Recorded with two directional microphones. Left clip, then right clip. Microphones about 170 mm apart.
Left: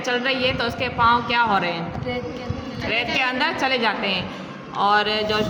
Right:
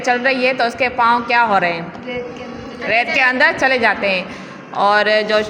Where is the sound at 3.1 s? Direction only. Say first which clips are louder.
Right 10 dB; 30° right (ahead or behind).